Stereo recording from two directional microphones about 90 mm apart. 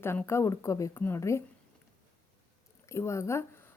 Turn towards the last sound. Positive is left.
turn(degrees=30)  # may be behind; listen again after turning